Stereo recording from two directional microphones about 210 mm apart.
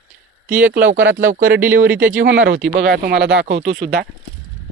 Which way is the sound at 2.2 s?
60° right (ahead or behind).